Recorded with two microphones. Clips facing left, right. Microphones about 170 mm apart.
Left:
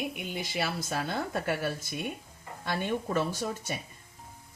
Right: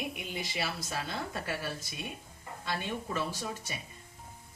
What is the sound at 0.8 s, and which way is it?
Speech, 55° left (ahead or behind).